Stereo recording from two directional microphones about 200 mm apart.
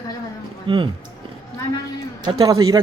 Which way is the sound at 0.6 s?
25° right (ahead or behind).